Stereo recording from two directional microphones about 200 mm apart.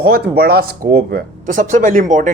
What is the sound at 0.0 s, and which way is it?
Speech, 50° right (ahead or behind).